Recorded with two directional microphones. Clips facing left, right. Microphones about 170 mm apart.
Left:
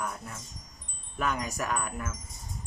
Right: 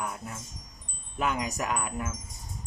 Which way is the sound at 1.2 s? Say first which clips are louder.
Right 1 dB; 15° right (ahead or behind).